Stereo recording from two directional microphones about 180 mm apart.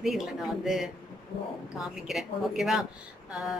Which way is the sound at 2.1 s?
Centre (ahead or behind).